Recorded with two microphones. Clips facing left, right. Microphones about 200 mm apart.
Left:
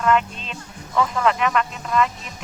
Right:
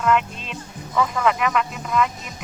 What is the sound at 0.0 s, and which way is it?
Speech, 5° right (ahead or behind).